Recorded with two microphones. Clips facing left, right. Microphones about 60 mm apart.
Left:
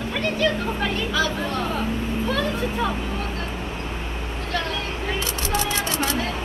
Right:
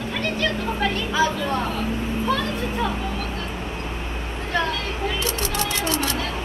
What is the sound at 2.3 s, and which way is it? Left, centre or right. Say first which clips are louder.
Vehicle: even; centre.